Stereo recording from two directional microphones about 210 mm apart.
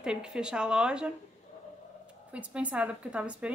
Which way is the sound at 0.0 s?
5° right (ahead or behind).